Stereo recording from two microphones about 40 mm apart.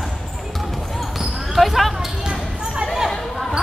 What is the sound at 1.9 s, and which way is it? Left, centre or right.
Basketball bounce, centre.